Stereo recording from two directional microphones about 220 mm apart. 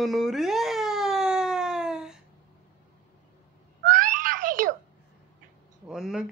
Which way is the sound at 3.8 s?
35° right (ahead or behind).